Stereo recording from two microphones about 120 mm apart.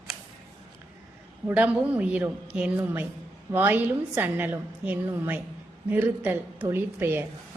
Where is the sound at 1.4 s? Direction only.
10° right (ahead or behind).